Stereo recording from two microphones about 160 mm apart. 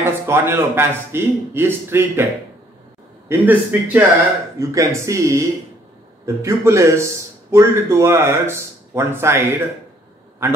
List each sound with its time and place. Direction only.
0.0 s a man's voice: 15° right (ahead or behind)
3.3 s a man's voice: 10° right (ahead or behind)